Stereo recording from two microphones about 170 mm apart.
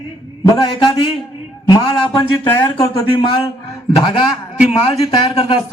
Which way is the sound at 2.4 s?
25° left (ahead or behind).